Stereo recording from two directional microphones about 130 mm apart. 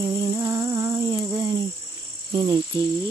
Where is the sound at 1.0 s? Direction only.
30° right (ahead or behind).